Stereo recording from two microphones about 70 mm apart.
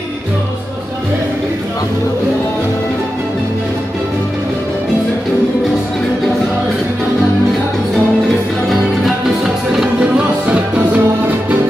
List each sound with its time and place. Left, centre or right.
8.6 s music: centre
9.9 s music: centre